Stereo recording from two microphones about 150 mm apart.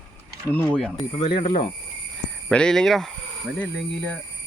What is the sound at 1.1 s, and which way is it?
Speech, 40° left (ahead or behind).